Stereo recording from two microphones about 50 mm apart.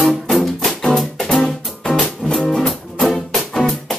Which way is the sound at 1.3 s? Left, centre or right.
Centre.